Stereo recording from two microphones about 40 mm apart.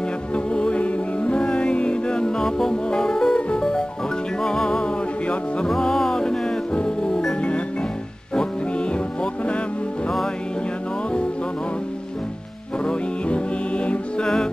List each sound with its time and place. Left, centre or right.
0.3 s music: left
8.4 s music: left
12.8 s music: left
14.2 s music: centre